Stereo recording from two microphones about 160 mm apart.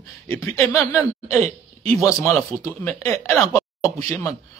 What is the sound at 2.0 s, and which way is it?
Speech, 15° left (ahead or behind).